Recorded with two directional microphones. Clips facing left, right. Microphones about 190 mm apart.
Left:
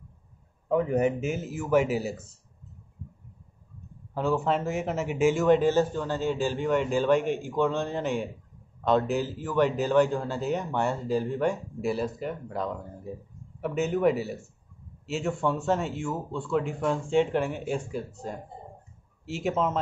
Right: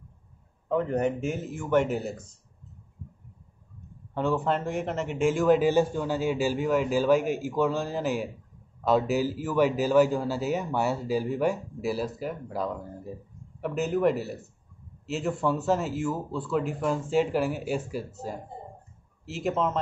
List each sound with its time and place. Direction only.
0.7 s speech: 10° left (ahead or behind)
4.1 s speech: centre (ahead or behind)